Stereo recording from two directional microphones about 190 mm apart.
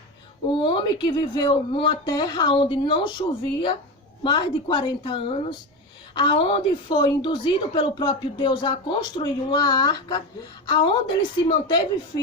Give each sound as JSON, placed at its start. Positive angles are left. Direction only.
{"t": 0.5, "sound": "a woman's voice", "side_deg": 25}